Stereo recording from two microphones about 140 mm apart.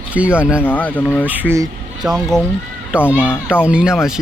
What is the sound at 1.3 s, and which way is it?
Speech, 15° right (ahead or behind).